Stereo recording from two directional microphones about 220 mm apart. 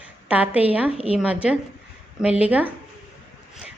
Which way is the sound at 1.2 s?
5° right (ahead or behind).